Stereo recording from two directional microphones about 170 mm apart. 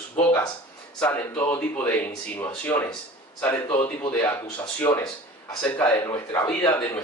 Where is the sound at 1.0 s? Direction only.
10° left (ahead or behind).